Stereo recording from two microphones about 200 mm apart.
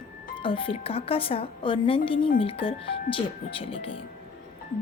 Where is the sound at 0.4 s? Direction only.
25° left (ahead or behind).